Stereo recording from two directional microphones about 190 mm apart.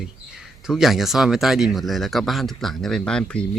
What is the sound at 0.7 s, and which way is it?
A woman's voice, centre (ahead or behind).